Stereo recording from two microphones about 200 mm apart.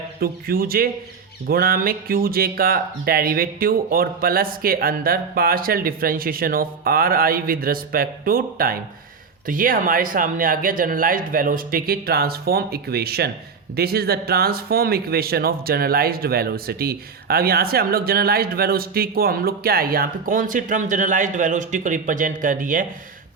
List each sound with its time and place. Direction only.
0.2 s speech: 50° right (ahead or behind)